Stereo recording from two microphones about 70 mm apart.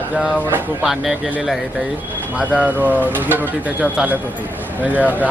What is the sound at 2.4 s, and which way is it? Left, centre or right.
Speech, right.